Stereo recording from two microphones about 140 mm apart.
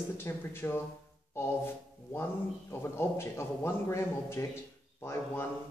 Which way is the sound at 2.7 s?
15° left (ahead or behind).